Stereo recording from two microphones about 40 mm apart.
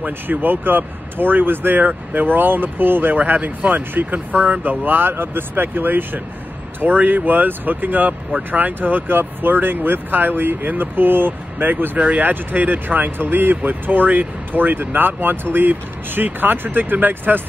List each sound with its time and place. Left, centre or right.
0.0 s speech: right
3.2 s speech: right